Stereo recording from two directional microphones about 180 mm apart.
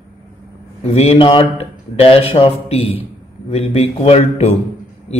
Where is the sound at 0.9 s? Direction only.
30° left (ahead or behind).